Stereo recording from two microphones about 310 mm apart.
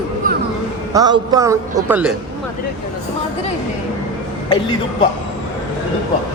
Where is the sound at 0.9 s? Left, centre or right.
Centre.